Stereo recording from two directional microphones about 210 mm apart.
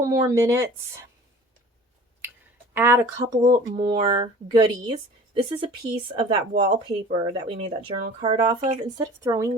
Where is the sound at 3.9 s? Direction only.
20° right (ahead or behind).